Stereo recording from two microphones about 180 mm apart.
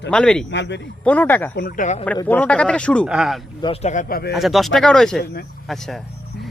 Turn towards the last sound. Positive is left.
turn(degrees=0)  # may be behind; listen again after turning